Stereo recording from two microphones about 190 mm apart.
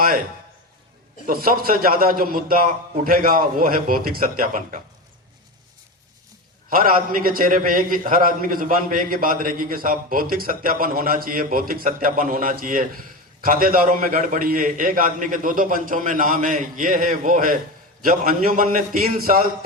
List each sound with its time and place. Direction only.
1.3 s a man's voice: 50° right (ahead or behind)
6.7 s a man's voice: 45° right (ahead or behind)